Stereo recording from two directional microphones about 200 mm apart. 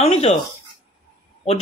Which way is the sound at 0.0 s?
30° left (ahead or behind).